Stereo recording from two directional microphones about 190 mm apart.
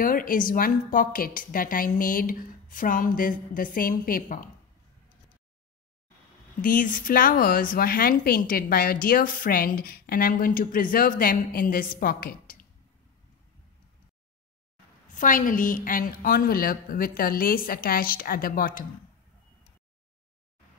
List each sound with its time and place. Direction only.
0.0 s a woman's voice: 45° left (ahead or behind)
6.6 s a woman's voice: 45° left (ahead or behind)
15.1 s a woman's voice: 45° left (ahead or behind)